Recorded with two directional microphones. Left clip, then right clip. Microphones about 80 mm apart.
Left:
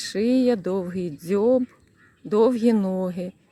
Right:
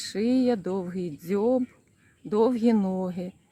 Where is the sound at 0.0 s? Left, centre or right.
Left.